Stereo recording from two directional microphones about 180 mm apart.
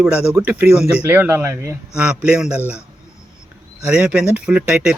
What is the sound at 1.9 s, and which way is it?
Speech, 5° right (ahead or behind).